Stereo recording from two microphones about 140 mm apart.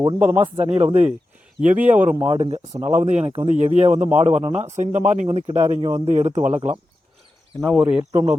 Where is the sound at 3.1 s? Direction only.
50° right (ahead or behind).